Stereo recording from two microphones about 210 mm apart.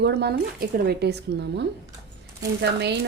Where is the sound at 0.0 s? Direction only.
55° right (ahead or behind).